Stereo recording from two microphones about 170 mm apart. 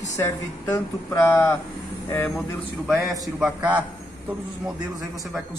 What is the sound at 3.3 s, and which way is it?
Speech, 5° right (ahead or behind).